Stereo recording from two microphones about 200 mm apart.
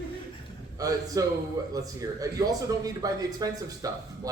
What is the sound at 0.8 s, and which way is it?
A man's voice, 15° right (ahead or behind).